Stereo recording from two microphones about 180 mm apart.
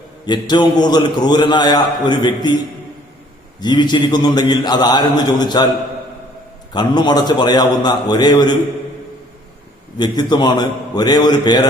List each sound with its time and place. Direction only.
0.3 s a man's voice: 25° left (ahead or behind)
3.6 s a man's voice: 25° left (ahead or behind)
6.7 s a man's voice: 25° left (ahead or behind)
10.0 s a man's voice: 25° left (ahead or behind)